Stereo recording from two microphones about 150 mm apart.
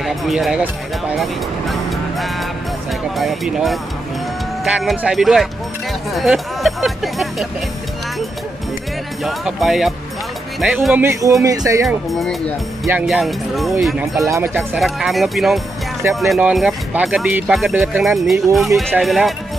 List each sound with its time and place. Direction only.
0.0 s speech: centre (ahead or behind)
9.2 s speech: centre (ahead or behind); by 11.9 s 20° right (ahead or behind)
12.1 s speech: centre (ahead or behind)
14.2 s speech: 15° right (ahead or behind)
14.8 s speech: centre (ahead or behind)